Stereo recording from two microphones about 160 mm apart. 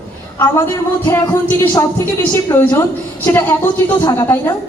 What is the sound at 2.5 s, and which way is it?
A woman's voice, 10° left (ahead or behind).